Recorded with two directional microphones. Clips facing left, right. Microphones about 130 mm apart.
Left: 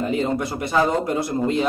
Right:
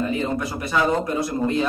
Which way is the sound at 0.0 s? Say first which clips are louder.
Left 2 dB; 20° left (ahead or behind).